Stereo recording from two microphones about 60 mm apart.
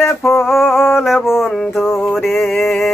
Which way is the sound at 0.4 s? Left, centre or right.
Centre.